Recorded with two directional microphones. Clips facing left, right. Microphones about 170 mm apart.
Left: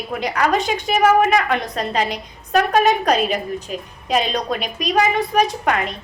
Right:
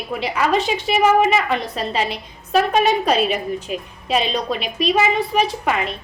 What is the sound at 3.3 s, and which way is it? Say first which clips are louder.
Speech: even; 35° left (ahead or behind).